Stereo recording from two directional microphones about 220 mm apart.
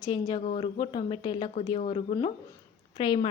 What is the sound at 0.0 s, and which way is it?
Speech, 20° left (ahead or behind).